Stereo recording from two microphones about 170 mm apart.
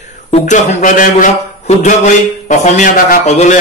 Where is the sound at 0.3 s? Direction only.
45° left (ahead or behind).